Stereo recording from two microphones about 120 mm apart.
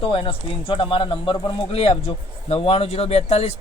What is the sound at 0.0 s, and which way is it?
Speech, 45° left (ahead or behind).